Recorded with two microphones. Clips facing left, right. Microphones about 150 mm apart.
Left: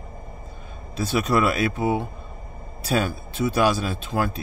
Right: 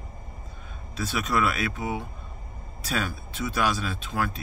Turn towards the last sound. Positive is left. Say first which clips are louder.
# left 4 dB
turn(degrees=35)  # may be behind; listen again after turning